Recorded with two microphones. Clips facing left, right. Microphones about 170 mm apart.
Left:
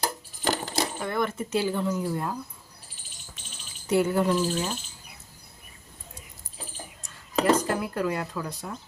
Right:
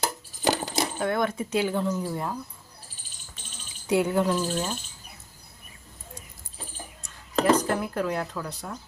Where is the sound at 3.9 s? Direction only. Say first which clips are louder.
Left 1 dB; 5° left (ahead or behind).